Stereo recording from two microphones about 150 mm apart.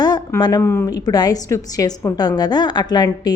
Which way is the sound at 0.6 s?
15° left (ahead or behind).